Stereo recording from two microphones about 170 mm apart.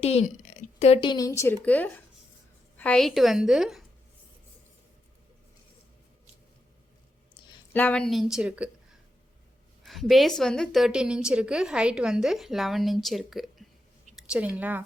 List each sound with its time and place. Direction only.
0.0 s a sound: 40° left (ahead or behind)
1.0 s a woman's voice: 20° left (ahead or behind); by 3.8 s centre (ahead or behind)
7.7 s a woman's voice: 10° left (ahead or behind); by 8.7 s 5° right (ahead or behind)
9.8 s a woman's voice: centre (ahead or behind)